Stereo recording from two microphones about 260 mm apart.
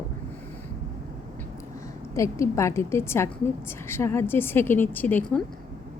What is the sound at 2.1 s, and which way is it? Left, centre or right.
A woman's voice, centre.